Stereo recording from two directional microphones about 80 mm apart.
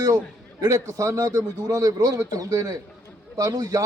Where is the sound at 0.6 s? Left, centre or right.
Right.